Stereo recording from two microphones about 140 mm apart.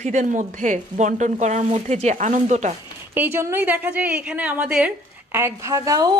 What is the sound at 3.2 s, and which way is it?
A woman's voice, 15° right (ahead or behind).